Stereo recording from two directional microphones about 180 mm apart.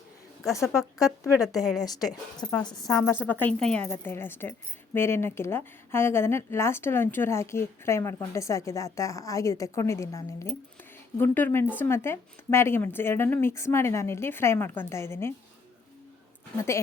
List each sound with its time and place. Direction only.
0.7 s a woman's voice: 15° left (ahead or behind)
1.4 s a woman's voice: centre (ahead or behind)
2.4 s a woman's voice: 15° left (ahead or behind)
16.6 s a woman's voice: 15° left (ahead or behind)